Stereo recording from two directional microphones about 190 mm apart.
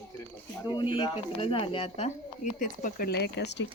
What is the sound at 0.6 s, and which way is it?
Speech, 25° left (ahead or behind).